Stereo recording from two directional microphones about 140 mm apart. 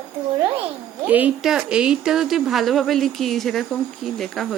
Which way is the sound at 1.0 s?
10° right (ahead or behind).